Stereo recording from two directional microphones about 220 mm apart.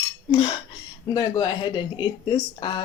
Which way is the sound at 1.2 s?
20° left (ahead or behind).